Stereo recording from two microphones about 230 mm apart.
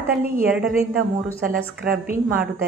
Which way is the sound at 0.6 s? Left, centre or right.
Right.